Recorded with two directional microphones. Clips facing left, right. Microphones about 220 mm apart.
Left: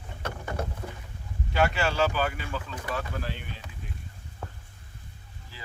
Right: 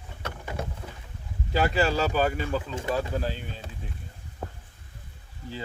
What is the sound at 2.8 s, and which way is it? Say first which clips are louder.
Speech: right 5 dB; 25° right (ahead or behind).